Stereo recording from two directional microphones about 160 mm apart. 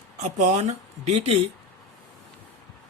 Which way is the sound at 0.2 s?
45° right (ahead or behind).